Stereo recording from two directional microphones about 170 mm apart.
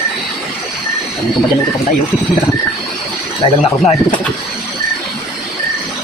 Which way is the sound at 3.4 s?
30° left (ahead or behind).